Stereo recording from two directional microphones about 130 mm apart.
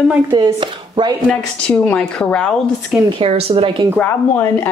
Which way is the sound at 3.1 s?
45° right (ahead or behind).